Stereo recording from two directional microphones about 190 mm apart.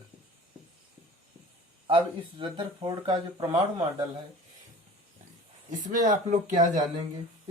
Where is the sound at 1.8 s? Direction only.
25° right (ahead or behind).